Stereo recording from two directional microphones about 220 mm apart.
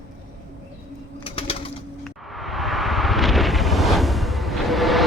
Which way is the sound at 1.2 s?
25° left (ahead or behind).